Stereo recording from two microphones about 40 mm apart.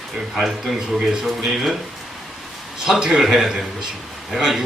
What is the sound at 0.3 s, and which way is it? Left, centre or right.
Speech, centre.